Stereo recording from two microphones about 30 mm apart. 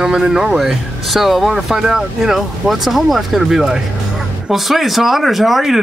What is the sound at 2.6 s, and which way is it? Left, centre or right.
Speech, centre.